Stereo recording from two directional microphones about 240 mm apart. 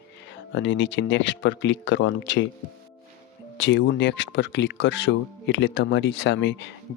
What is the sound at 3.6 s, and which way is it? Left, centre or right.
Speech, left.